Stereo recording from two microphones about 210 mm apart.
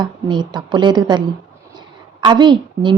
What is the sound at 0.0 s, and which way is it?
A woman's voice, 20° right (ahead or behind).